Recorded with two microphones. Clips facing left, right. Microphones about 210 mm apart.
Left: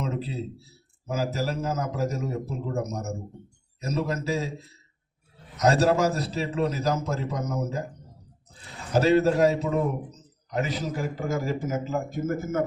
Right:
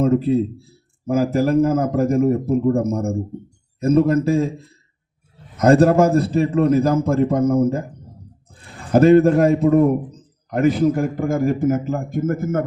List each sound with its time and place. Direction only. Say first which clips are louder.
0.0 s a man's voice: right 15 dB; 55° right (ahead or behind)